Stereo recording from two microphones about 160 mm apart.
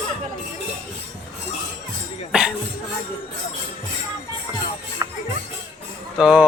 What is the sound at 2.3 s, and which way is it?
Music, 5° right (ahead or behind).